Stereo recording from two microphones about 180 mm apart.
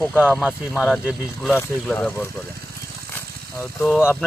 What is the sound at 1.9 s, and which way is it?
Speech, 10° left (ahead or behind).